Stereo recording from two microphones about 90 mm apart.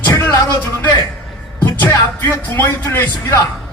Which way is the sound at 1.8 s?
25° left (ahead or behind).